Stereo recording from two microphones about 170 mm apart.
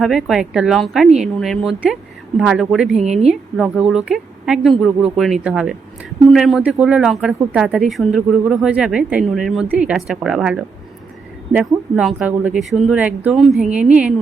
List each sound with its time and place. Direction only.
0.0 s speech: centre (ahead or behind)
3.0 s a woman's voice: 40° right (ahead or behind)
3.6 s speech: 5° right (ahead or behind)